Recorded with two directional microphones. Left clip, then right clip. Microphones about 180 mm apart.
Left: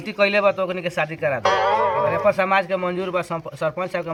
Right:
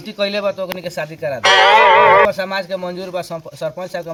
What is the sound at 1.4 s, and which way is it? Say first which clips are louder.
Speech: right 10 dB; 80° right.